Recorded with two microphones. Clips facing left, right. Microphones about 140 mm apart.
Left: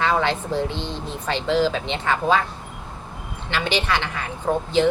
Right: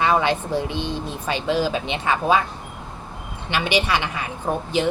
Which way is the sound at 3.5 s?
15° right (ahead or behind).